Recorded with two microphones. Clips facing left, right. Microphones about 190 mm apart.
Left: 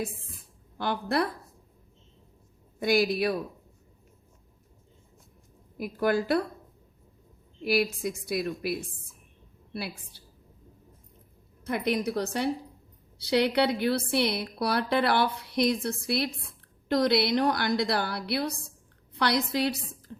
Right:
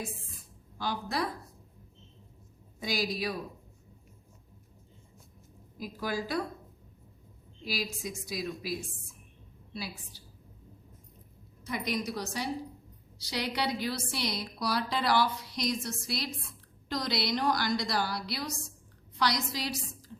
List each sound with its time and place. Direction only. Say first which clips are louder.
0.8 s a woman's voice: left 5 dB; 60° left (ahead or behind)
2.8 s a woman's voice: left 8 dB; 60° left (ahead or behind)
5.7 s a woman's voice: left 8 dB; 60° left (ahead or behind)
7.6 s a woman's voice: left 10 dB; 60° left (ahead or behind)
10.1 s a sound: even; 65° left (ahead or behind)
11.6 s a woman's voice: left 6 dB; 55° left (ahead or behind)